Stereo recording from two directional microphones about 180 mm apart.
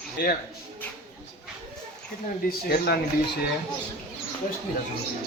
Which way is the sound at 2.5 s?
55° left (ahead or behind).